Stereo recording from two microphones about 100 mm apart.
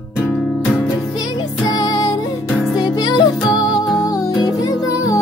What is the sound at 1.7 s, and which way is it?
Music, 40° left (ahead or behind).